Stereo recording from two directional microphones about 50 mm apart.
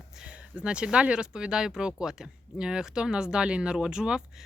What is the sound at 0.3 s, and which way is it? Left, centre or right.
Speech, right.